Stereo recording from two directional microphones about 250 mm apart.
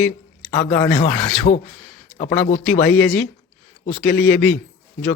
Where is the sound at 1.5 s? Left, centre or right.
Left.